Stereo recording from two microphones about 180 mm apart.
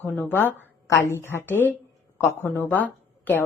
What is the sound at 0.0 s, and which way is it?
A woman's voice, 10° left (ahead or behind).